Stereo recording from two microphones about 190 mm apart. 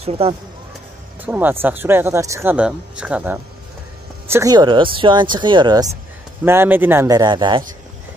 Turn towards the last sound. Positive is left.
turn(degrees=-25)  # may be behind; listen again after turning